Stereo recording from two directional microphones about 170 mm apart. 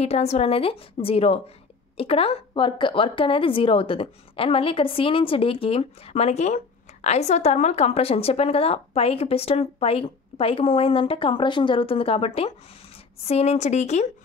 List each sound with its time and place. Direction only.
0.0 s a woman's voice: 40° left (ahead or behind)